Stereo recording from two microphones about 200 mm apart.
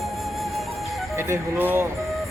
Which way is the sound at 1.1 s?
15° right (ahead or behind).